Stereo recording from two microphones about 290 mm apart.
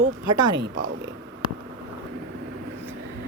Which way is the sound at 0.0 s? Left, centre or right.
Right.